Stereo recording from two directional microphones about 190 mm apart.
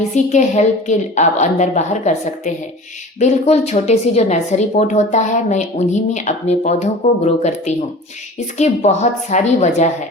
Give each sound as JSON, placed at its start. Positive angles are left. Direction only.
{"t": 0.1, "sound": "a woman's voice", "side_deg": 35}